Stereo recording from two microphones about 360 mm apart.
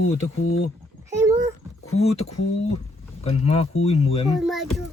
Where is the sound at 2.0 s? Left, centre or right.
Centre.